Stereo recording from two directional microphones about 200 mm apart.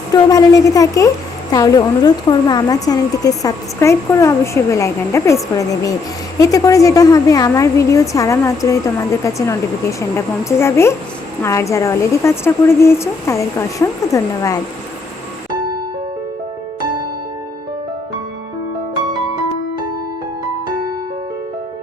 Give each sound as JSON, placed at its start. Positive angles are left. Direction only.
{"t": 0.1, "sound": "a woman's voice", "side_deg": 15}